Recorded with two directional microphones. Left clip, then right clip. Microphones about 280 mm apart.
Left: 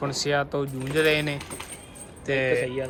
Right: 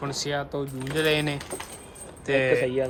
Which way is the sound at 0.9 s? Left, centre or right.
Centre.